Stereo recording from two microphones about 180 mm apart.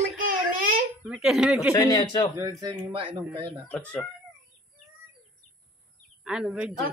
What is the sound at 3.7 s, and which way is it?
Speech, 5° left (ahead or behind).